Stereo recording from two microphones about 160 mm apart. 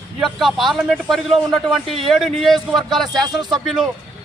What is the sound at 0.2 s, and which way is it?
A man's voice, centre (ahead or behind).